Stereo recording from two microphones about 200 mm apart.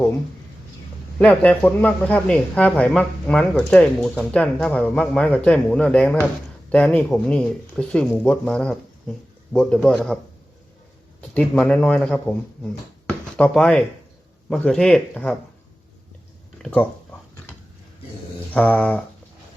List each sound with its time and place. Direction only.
1.2 s speech: 5° left (ahead or behind)
11.2 s speech: 5° left (ahead or behind)
16.6 s speech: 5° left (ahead or behind)
18.5 s a sound: 5° left (ahead or behind)